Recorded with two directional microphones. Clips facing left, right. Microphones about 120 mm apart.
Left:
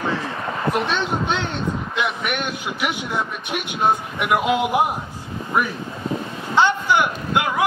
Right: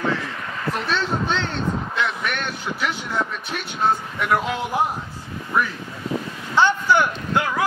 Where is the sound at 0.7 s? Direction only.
15° left (ahead or behind).